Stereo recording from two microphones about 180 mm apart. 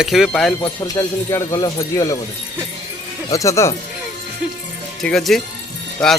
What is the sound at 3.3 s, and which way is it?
Speech, 15° left (ahead or behind).